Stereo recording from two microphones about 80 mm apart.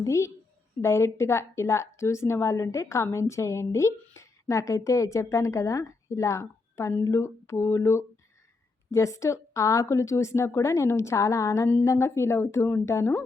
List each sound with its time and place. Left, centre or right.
0.0 s a woman's voice: left